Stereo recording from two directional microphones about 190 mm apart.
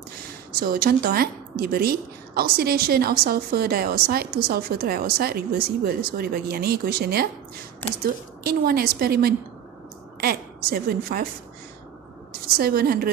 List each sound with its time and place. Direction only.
0.6 s a woman's voice: 55° right (ahead or behind)
8.5 s a woman's voice: 55° right (ahead or behind)
12.3 s a woman's voice: 55° right (ahead or behind)